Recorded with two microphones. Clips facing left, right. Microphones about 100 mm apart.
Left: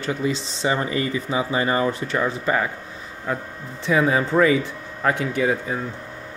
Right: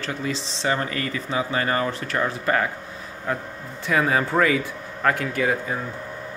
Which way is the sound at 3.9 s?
5° left (ahead or behind).